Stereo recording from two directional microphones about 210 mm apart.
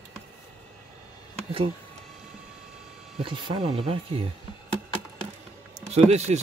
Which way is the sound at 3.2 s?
25° right (ahead or behind).